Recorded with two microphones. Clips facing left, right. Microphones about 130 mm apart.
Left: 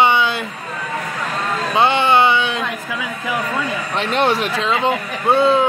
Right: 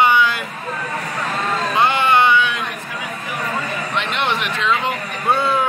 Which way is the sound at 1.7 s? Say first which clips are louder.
Left 2 dB; 25° left (ahead or behind).